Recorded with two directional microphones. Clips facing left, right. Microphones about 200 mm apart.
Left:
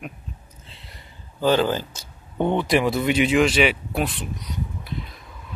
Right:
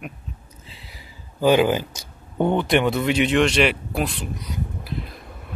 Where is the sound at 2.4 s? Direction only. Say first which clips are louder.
Right 1 dB; centre (ahead or behind).